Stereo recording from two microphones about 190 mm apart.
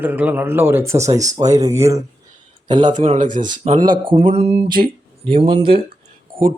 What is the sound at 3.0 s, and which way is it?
Speech, 40° right (ahead or behind).